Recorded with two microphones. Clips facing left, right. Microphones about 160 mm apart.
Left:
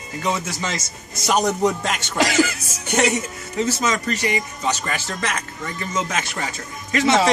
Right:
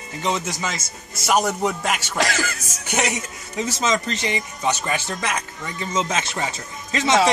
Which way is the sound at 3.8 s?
25° right (ahead or behind).